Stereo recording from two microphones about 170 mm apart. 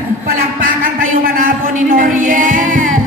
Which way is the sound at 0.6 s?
55° right (ahead or behind).